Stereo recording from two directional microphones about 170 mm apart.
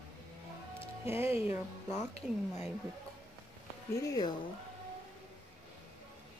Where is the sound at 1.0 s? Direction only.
15° right (ahead or behind).